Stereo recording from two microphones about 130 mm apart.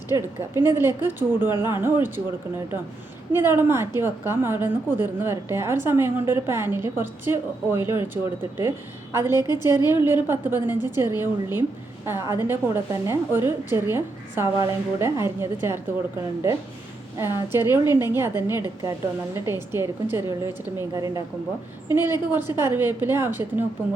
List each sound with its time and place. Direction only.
0.1 s a woman's voice: 20° right (ahead or behind)
3.3 s a woman's voice: 15° right (ahead or behind)
17.2 s a woman's voice: 20° right (ahead or behind)